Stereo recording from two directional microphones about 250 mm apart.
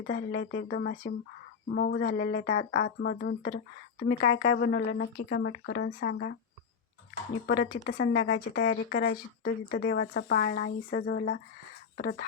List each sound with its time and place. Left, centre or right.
0.1 s speech: left
7.4 s speech: left